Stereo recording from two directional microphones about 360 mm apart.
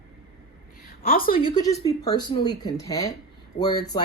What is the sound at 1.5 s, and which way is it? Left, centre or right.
Speech, centre.